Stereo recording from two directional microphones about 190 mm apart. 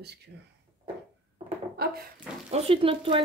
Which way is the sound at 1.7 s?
50° right (ahead or behind).